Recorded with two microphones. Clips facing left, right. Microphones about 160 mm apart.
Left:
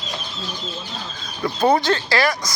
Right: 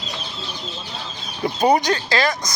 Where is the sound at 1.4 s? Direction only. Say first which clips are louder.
Even; 20° right (ahead or behind).